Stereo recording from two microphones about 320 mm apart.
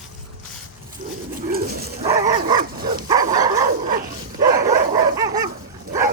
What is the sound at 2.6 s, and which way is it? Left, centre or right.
Dog, right.